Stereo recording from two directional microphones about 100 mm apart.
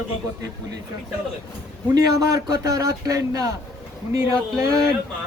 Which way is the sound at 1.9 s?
40° right (ahead or behind).